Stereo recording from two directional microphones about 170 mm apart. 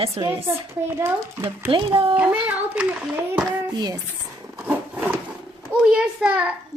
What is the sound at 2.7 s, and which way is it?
Speech, 10° right (ahead or behind).